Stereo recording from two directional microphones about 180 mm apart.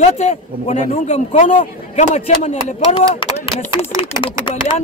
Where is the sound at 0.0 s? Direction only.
35° left (ahead or behind).